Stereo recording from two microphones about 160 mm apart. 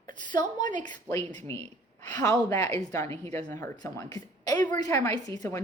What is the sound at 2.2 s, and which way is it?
A woman's voice, 15° left (ahead or behind).